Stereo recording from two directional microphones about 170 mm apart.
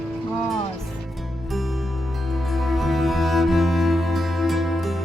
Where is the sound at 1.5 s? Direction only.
Centre (ahead or behind).